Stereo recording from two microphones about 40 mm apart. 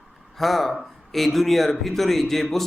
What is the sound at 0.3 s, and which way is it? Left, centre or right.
Speech, centre.